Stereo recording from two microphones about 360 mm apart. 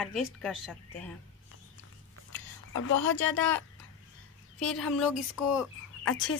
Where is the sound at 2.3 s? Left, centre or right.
Left.